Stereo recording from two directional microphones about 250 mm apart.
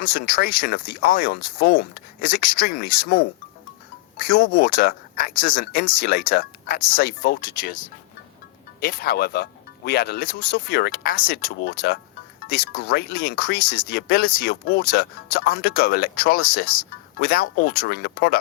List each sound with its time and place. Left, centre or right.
0.0 s speech: left